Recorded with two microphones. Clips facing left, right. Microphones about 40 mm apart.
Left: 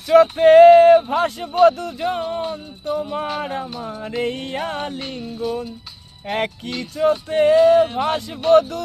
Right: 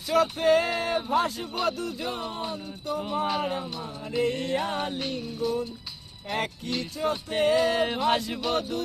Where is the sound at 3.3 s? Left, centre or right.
Left.